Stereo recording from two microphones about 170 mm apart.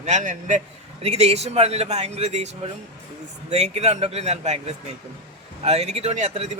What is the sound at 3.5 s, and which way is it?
Speech, 40° right (ahead or behind).